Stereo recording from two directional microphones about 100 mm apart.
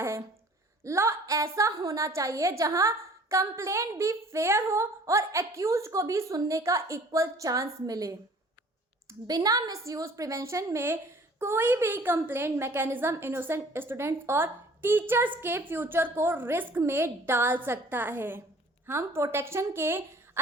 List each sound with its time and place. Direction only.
0.9 s a woman's voice: 30° right (ahead or behind)
9.2 s a woman's voice: 40° right (ahead or behind); by 20.4 s 25° right (ahead or behind)